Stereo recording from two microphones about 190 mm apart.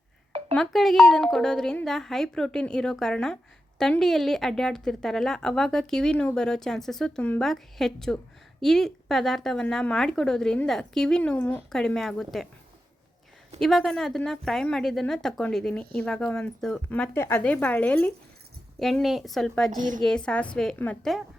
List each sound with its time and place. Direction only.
0.5 s speech: centre (ahead or behind)
13.6 s speech: centre (ahead or behind)
19.7 s a woman's voice: 45° right (ahead or behind)
20.0 s speech: 5° left (ahead or behind)